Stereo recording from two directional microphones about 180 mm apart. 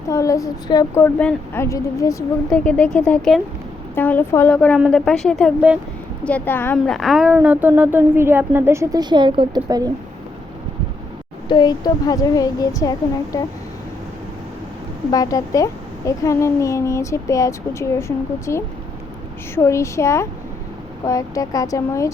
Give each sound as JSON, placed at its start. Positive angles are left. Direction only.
{"t": 0.1, "sound": "speech", "side_deg": 20}
{"t": 6.2, "sound": "speech", "side_deg": 10}
{"t": 6.9, "sound": "a woman's voice", "side_deg": 0}
{"t": 11.4, "sound": "a woman's voice", "side_deg": 25}
{"t": 15.1, "sound": "speech", "side_deg": 20}